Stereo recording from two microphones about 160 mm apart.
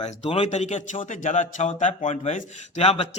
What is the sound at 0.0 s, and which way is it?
A man's voice, 40° left (ahead or behind).